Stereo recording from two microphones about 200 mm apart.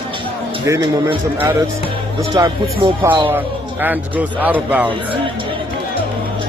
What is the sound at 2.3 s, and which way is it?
Speech, 15° right (ahead or behind).